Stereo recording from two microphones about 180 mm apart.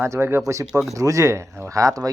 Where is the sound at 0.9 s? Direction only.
15° right (ahead or behind).